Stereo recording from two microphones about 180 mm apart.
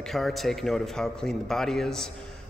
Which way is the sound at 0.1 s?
Centre (ahead or behind).